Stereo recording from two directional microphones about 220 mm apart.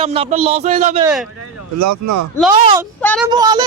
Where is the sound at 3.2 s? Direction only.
15° right (ahead or behind).